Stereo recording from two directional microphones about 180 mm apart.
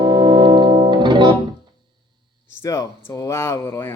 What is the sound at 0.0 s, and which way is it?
Music, 20° right (ahead or behind).